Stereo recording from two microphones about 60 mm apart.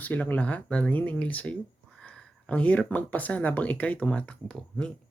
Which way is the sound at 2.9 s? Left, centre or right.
Left.